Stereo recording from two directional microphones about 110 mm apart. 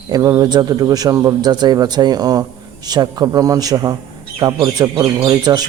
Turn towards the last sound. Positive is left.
turn(degrees=-40)  # may be behind; listen again after turning